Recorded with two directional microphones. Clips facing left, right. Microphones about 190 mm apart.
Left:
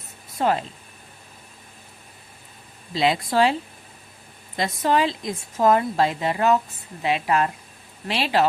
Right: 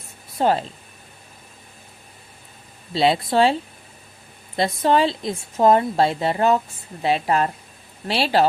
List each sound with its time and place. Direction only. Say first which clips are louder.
0.3 s speech: right 3 dB; 30° right (ahead or behind)
2.9 s a woman's voice: right 3 dB; 30° right (ahead or behind)